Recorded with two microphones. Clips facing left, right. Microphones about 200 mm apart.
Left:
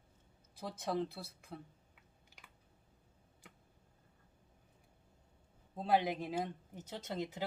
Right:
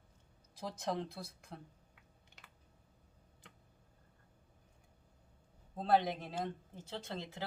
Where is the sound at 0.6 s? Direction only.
Centre (ahead or behind).